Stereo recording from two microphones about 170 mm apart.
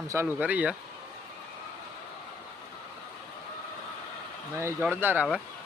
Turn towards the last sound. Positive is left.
turn(degrees=-10)  # may be behind; listen again after turning